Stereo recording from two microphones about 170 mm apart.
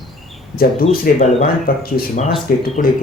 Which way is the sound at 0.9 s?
60° left (ahead or behind).